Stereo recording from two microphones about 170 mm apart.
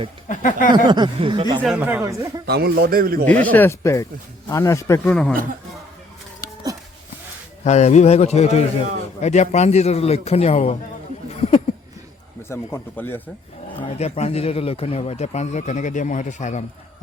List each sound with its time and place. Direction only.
0.3 s speech: 50° left (ahead or behind)
0.7 s speech: 25° right (ahead or behind)
1.6 s speech: 10° right (ahead or behind)
2.5 s a man's voice: 70° right (ahead or behind)
3.5 s speech: 15° left (ahead or behind)
5.0 s speech: 5° left (ahead or behind)
7.6 s speech: 40° left (ahead or behind)
12.4 s speech: 15° left (ahead or behind)
13.7 s speech: 40° left (ahead or behind)